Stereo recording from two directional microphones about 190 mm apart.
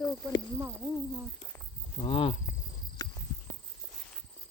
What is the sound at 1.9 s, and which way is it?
Speech, 25° left (ahead or behind).